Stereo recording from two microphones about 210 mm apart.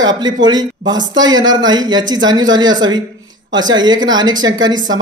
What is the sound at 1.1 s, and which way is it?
A man's voice, 20° right (ahead or behind).